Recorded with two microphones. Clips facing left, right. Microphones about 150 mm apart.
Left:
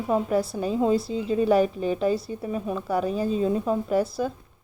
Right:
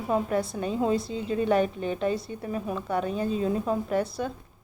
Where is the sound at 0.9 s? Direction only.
30° left (ahead or behind).